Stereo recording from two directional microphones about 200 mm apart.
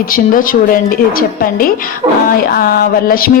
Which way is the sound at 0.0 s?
45° left (ahead or behind).